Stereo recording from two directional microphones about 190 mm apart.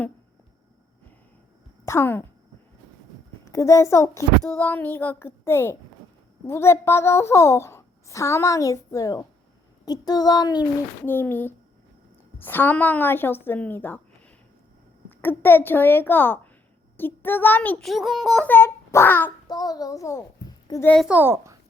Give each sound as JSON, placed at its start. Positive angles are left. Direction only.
{"t": 1.8, "sound": "speech", "side_deg": 15}
{"t": 3.4, "sound": "a child's voice", "side_deg": 15}
{"t": 11.0, "sound": "a child's voice", "side_deg": 10}
{"t": 15.2, "sound": "a child's voice", "side_deg": 10}
{"t": 20.9, "sound": "a child's voice", "side_deg": -5}